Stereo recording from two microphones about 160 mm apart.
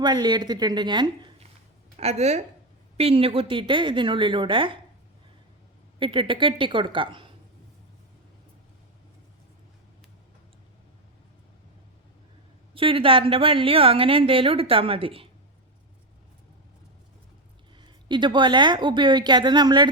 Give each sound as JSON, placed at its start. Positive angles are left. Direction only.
{"t": 0.0, "sound": "a woman's voice", "side_deg": -25}
{"t": 2.0, "sound": "a woman's voice", "side_deg": -40}
{"t": 6.0, "sound": "a woman's voice", "side_deg": -30}
{"t": 12.7, "sound": "a woman's voice", "side_deg": -35}
{"t": 17.7, "sound": "a woman's voice", "side_deg": -30}